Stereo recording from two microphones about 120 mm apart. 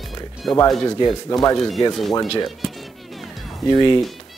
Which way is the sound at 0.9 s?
35° left (ahead or behind).